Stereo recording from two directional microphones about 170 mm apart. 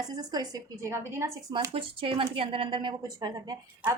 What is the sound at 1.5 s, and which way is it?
A woman's voice, 30° right (ahead or behind).